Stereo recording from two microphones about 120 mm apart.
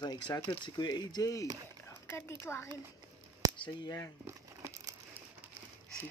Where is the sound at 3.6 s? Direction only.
40° left (ahead or behind).